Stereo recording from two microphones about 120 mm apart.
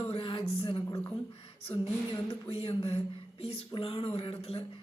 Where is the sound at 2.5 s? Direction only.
55° left (ahead or behind).